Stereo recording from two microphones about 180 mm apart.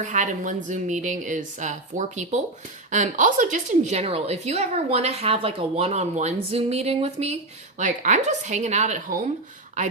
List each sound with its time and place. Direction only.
0.0 s a woman's voice: 45° right (ahead or behind)